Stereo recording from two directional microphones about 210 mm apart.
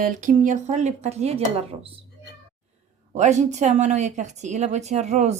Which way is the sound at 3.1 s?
35° right (ahead or behind).